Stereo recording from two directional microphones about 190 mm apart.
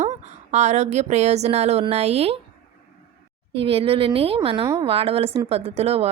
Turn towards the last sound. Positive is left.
turn(degrees=-30)  # may be behind; listen again after turning